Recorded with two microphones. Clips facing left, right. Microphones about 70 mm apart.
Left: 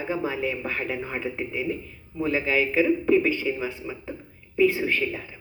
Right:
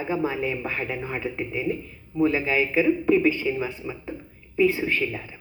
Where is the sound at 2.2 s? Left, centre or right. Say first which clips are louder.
Right 2 dB; centre.